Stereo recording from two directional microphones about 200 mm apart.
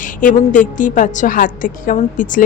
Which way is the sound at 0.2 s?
40° left (ahead or behind).